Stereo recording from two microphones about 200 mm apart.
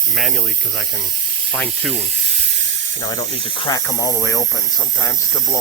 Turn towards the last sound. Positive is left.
turn(degrees=15)  # may be behind; listen again after turning